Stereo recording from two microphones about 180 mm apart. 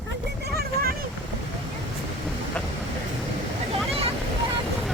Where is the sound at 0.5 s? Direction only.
60° right (ahead or behind).